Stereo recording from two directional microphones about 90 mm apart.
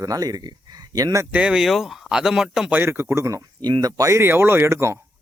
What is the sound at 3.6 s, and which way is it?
Speech, 50° right (ahead or behind).